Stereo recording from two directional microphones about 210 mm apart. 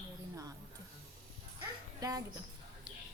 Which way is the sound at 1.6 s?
15° right (ahead or behind).